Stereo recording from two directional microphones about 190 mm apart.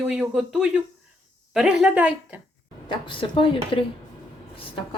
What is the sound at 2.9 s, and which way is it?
Speech, 25° left (ahead or behind).